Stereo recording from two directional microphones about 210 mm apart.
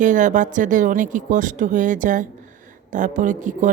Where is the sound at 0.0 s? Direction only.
35° right (ahead or behind).